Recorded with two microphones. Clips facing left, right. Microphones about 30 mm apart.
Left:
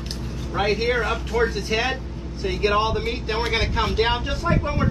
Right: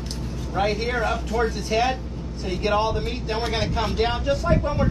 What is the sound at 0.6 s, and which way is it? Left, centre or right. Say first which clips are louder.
Speech: left 2 dB; centre.